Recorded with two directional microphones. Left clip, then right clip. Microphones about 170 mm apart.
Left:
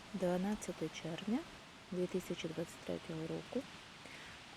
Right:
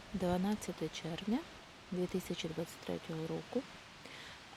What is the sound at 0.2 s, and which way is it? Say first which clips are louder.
Speech: right 1 dB; 20° right (ahead or behind).